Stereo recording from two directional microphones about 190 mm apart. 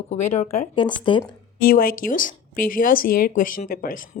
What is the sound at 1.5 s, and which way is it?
Speech, 50° left (ahead or behind).